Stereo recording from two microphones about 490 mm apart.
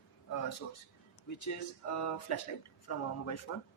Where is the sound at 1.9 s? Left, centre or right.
Left.